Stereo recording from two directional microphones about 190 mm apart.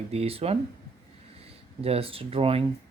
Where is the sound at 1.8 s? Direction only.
30° right (ahead or behind).